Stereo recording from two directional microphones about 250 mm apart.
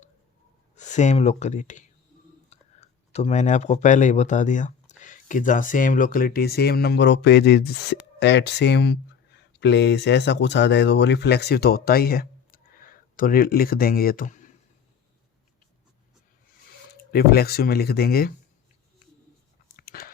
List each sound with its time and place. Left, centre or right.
0.8 s speech: left
16.9 s speech: left
19.7 s biting: left